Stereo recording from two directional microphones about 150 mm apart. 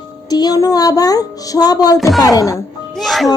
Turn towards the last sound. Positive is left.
turn(degrees=0)  # may be behind; listen again after turning